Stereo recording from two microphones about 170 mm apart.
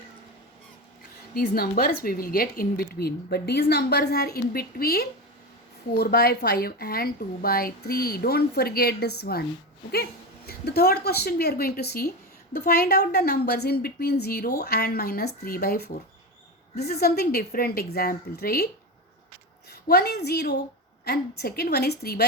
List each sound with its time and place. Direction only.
1.3 s a woman's voice: 65° left (ahead or behind)
19.7 s a woman's voice: 65° left (ahead or behind)